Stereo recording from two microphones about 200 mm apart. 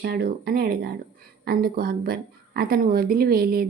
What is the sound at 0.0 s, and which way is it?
A woman's voice, 50° right (ahead or behind).